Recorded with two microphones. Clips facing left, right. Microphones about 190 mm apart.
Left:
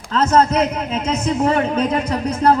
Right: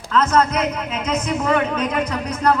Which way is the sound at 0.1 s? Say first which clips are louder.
Left 2 dB; 30° left (ahead or behind).